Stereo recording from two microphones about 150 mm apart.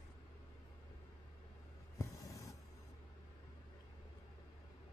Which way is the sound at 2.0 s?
20° left (ahead or behind).